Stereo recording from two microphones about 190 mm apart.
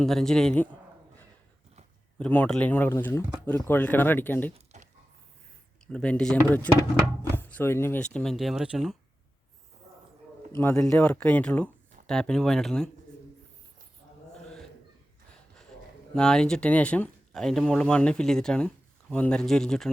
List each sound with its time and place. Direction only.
0.0 s speech: centre (ahead or behind)
2.1 s speech: 5° left (ahead or behind)
4.5 s a sound: 35° right (ahead or behind)
5.9 s speech: 5° left (ahead or behind)
10.6 s speech: 10° left (ahead or behind)
16.1 s speech: 5° left (ahead or behind)